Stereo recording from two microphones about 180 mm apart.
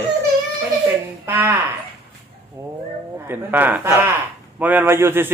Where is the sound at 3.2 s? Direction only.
10° right (ahead or behind).